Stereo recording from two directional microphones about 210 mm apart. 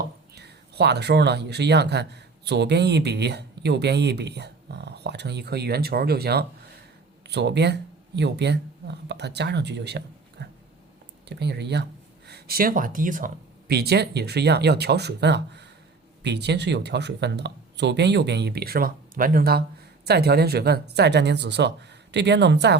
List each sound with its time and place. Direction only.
0.3 s a man's voice: 55° right (ahead or behind)